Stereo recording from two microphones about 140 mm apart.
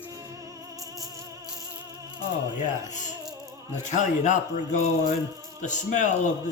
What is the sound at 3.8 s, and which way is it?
Speech, 60° left (ahead or behind).